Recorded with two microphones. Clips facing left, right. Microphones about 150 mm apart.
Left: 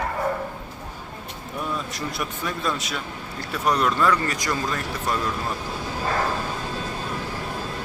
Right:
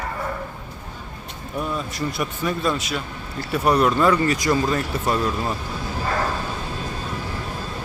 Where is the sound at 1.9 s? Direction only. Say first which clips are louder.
Right 4 dB; centre (ahead or behind).